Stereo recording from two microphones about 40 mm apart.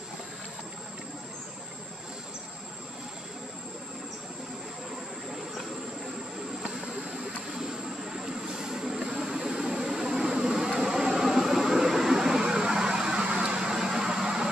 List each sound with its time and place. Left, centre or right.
8.1 s vehicle: centre